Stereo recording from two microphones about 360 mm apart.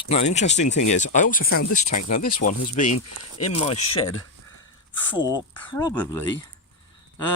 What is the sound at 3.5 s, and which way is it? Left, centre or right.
Speech, centre.